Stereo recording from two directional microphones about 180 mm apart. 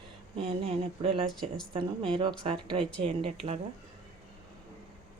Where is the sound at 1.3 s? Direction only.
Centre (ahead or behind).